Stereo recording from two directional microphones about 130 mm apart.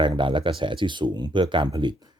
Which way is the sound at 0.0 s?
40° right (ahead or behind).